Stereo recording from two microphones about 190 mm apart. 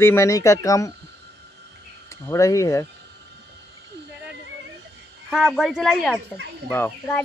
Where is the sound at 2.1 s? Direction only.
15° left (ahead or behind).